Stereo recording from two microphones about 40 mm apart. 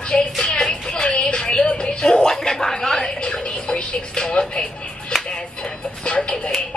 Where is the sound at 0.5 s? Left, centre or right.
Left.